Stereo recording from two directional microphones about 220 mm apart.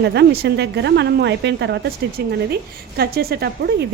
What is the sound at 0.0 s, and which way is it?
Speech, 50° right (ahead or behind).